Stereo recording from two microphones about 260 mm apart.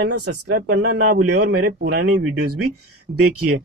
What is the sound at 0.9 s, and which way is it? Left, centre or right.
Speech, right.